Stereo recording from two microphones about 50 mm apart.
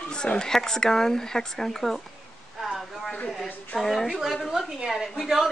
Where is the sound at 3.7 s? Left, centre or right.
Centre.